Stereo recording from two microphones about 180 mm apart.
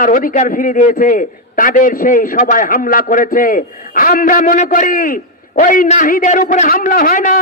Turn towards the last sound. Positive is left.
turn(degrees=50)  # may be behind; listen again after turning